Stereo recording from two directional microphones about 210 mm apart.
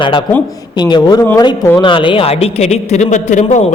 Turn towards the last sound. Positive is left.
turn(degrees=35)  # may be behind; listen again after turning